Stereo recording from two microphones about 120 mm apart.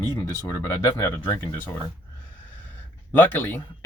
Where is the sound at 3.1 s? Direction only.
15° left (ahead or behind).